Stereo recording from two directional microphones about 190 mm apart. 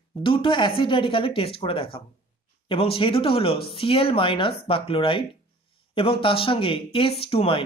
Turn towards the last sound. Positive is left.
turn(degrees=30)  # may be behind; listen again after turning